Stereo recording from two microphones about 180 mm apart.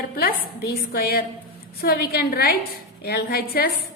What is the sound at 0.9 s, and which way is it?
A woman's voice, 60° left (ahead or behind).